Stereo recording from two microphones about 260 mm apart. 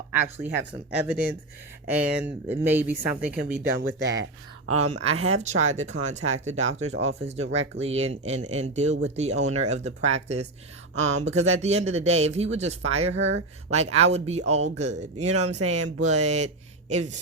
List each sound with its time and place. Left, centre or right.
0.1 s speech: centre
4.8 s speech: right
13.1 s speech: right
13.7 s speech: right